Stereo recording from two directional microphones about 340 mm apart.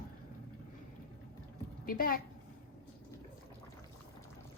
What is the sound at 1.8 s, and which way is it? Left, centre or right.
Speech, left.